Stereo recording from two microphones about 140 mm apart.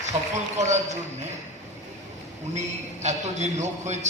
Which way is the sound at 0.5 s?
55° right (ahead or behind).